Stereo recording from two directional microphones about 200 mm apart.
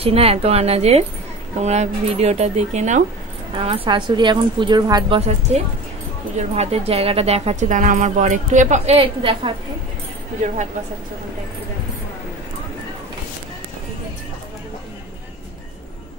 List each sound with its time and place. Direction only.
0.0 s a woman's voice: 30° right (ahead or behind)
5.5 s speech: 35° right (ahead or behind)